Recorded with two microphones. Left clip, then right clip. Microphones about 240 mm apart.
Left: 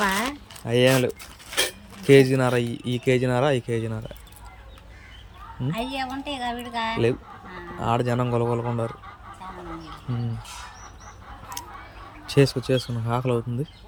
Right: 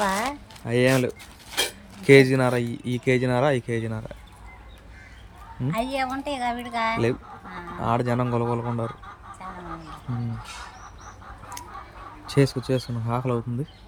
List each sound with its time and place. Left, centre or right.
0.0 s a sound: right
0.6 s speech: centre
1.5 s dog: centre
2.0 s speech: centre
5.6 s speech: centre
11.6 s a sound: centre
12.2 s speech: centre